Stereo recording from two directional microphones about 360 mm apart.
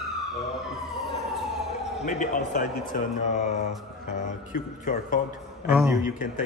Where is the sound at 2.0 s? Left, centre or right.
Left.